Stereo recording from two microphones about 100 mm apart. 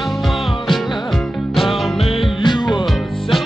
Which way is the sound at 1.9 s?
75° left (ahead or behind).